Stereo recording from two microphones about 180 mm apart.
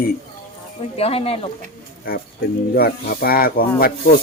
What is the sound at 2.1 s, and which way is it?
Speech, 55° left (ahead or behind).